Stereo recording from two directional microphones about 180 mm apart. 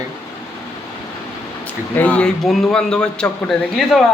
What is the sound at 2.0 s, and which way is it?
A man's voice, 5° left (ahead or behind).